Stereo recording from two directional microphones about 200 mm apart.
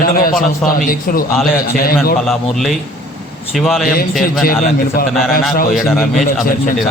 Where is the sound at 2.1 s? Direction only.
Centre (ahead or behind).